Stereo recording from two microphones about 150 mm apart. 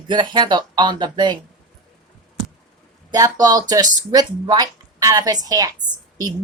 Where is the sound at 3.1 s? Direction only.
25° right (ahead or behind).